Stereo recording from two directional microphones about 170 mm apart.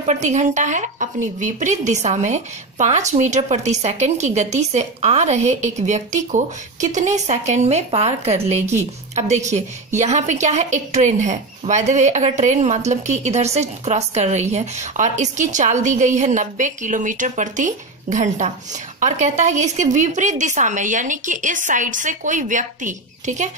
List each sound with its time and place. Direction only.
0.0 s a woman's voice: 45° right (ahead or behind)